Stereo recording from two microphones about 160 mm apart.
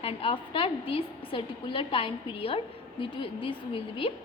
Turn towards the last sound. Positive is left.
turn(degrees=35)  # may be behind; listen again after turning